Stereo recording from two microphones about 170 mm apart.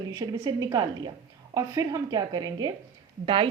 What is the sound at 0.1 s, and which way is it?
A woman's voice, 20° right (ahead or behind).